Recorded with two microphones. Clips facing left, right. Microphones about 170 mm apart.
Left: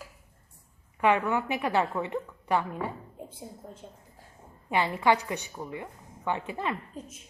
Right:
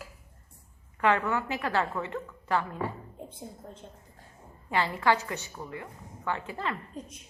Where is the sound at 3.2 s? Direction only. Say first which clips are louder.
Right 1 dB; 10° left (ahead or behind).